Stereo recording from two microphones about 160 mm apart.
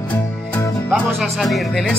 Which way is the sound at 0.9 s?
Centre (ahead or behind).